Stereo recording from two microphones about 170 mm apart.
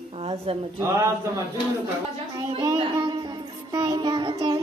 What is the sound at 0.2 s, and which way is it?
Speech, 35° right (ahead or behind).